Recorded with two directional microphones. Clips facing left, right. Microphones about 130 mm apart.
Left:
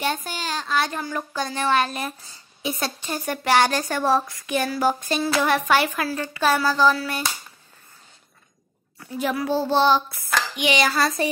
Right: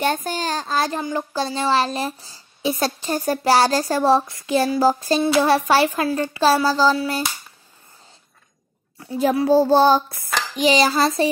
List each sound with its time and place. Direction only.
0.0 s a woman's voice: 45° right (ahead or behind)
6.2 s a sound: 25° right (ahead or behind)
9.0 s a woman's voice: 30° right (ahead or behind)